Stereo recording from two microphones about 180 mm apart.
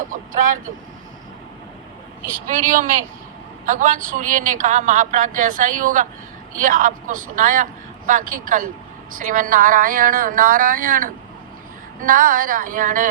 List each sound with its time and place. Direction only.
0.0 s vehicle: 45° right (ahead or behind)
2.5 s a woman's voice: 45° right (ahead or behind)